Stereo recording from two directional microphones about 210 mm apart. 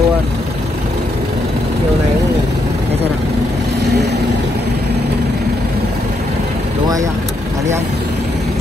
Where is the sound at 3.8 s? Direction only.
55° right (ahead or behind).